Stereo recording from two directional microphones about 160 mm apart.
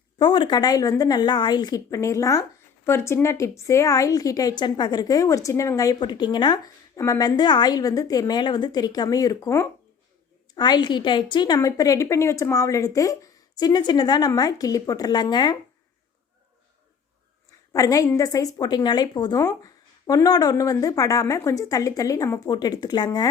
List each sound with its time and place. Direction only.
0.2 s a woman's voice: 30° left (ahead or behind)
17.7 s a woman's voice: 20° left (ahead or behind)